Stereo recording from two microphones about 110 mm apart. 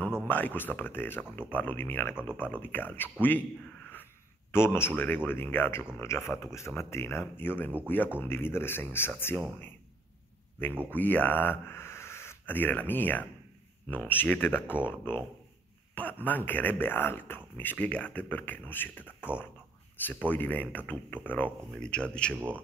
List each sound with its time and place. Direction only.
0.3 s speech: 15° left (ahead or behind)
11.0 s speech: 15° left (ahead or behind)